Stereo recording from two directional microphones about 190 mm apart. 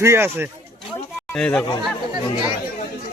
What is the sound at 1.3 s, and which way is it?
Speech, 5° left (ahead or behind).